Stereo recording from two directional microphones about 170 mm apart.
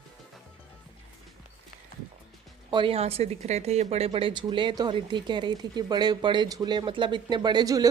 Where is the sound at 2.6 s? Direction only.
30° right (ahead or behind).